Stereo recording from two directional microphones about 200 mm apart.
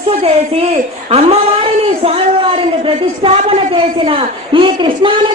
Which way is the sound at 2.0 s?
30° right (ahead or behind).